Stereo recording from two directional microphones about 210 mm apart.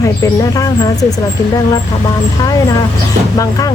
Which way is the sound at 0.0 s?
15° left (ahead or behind).